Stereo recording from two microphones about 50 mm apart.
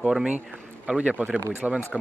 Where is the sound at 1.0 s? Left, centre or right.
Right.